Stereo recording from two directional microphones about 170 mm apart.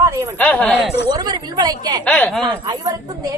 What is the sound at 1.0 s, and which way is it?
Speech, 25° right (ahead or behind).